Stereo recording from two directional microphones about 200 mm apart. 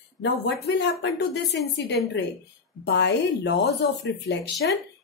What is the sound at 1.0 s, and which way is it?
Speech, 60° left (ahead or behind).